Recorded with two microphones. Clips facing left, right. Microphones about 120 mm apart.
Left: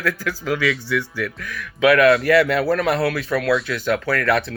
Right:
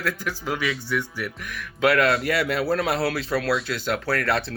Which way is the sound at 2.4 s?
90° left.